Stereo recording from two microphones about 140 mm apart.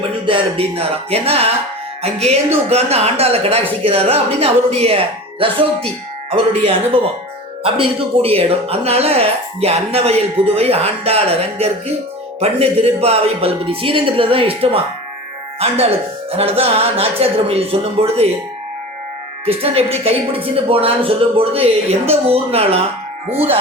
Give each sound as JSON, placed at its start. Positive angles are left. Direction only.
{"t": 0.3, "sound": "speech", "side_deg": -45}
{"t": 16.3, "sound": "speech", "side_deg": -45}
{"t": 19.5, "sound": "speech", "side_deg": -45}